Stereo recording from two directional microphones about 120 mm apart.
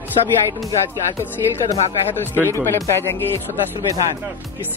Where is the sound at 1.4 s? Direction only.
30° right (ahead or behind).